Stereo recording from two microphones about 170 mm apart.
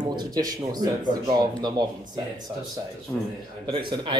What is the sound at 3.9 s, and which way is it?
Speech, 25° right (ahead or behind).